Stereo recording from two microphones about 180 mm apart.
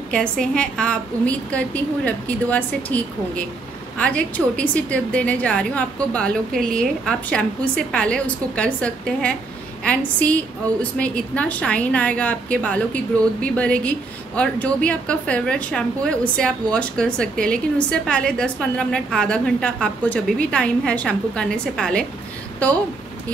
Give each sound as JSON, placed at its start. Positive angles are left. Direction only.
{"t": 0.1, "sound": "a woman's voice", "side_deg": 5}